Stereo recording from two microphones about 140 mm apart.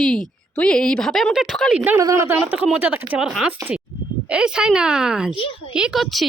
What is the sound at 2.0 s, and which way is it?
A woman's voice, 20° right (ahead or behind).